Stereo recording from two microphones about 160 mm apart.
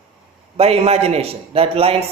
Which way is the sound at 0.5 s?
40° right (ahead or behind).